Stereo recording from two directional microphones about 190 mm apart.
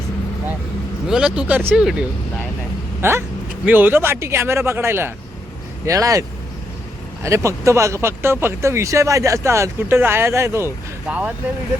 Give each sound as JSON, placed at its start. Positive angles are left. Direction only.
{"t": 1.0, "sound": "speech", "side_deg": -5}